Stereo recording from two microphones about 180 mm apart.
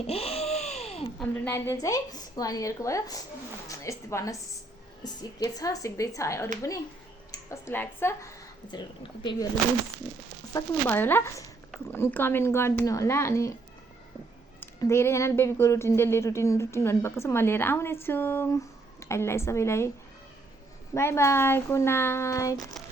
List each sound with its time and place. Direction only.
0.1 s a sound: 35° left (ahead or behind)
1.2 s a woman's voice: 15° left (ahead or behind)
8.6 s a woman's voice: 25° left (ahead or behind)
10.5 s speech: 10° left (ahead or behind)
14.6 s speech: 15° left (ahead or behind)
20.9 s speech: 15° left (ahead or behind)
22.8 s a sound: centre (ahead or behind)